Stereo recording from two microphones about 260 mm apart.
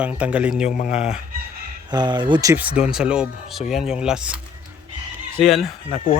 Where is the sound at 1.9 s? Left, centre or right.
Centre.